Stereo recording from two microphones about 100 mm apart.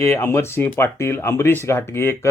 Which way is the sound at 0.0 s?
25° left (ahead or behind).